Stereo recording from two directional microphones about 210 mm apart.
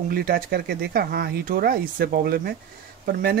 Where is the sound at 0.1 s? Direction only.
45° right (ahead or behind).